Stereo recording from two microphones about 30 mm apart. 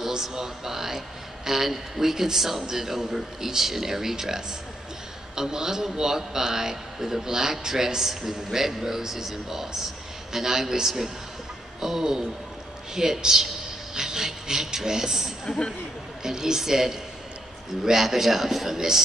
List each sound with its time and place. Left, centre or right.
0.0 s a man's voice: centre
15.4 s speech: left
16.2 s a man's voice: centre